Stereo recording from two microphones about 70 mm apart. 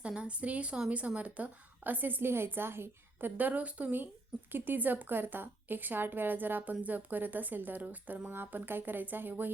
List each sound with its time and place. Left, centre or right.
0.0 s a woman's voice: centre